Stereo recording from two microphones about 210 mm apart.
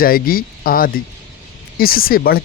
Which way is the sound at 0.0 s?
45° left (ahead or behind).